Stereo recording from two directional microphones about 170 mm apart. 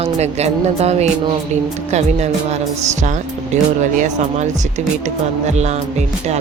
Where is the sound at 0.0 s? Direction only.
40° right (ahead or behind).